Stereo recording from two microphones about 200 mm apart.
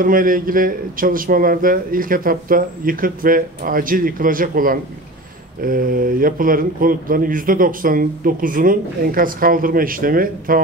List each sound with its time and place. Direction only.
0.0 s speech: 45° right (ahead or behind)